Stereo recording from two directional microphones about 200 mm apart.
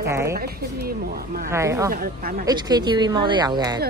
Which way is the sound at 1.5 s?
15° right (ahead or behind).